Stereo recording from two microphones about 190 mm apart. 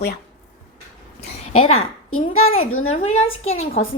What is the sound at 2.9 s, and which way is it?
Speech, 35° left (ahead or behind).